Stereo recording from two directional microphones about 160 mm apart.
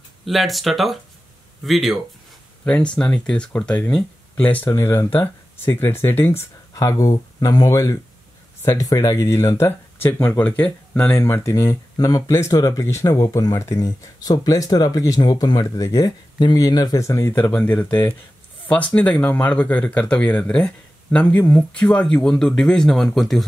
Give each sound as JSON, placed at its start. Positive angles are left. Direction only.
{"t": 0.2, "sound": "speech", "side_deg": 0}